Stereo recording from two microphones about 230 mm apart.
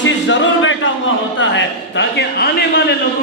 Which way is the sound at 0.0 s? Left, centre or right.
Left.